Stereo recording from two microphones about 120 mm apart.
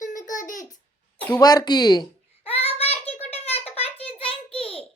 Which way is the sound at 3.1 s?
60° left (ahead or behind).